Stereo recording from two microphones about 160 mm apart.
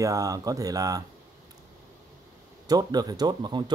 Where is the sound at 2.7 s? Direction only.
25° right (ahead or behind).